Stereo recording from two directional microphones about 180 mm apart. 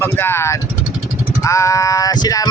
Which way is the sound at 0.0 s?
15° left (ahead or behind).